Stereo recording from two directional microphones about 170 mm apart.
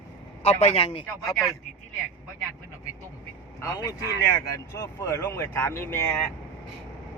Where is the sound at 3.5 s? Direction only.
20° left (ahead or behind).